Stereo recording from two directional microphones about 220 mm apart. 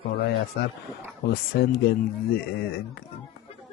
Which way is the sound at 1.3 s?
45° left (ahead or behind).